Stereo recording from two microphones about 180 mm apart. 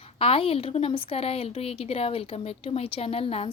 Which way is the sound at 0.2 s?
30° left (ahead or behind).